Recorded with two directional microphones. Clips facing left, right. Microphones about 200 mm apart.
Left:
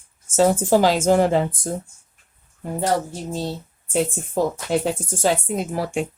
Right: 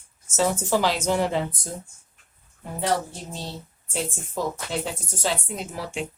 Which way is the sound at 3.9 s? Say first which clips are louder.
Left 8 dB; 50° left (ahead or behind).